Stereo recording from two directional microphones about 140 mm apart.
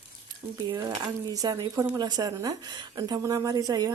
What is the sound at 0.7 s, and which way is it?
A woman's voice, 25° right (ahead or behind).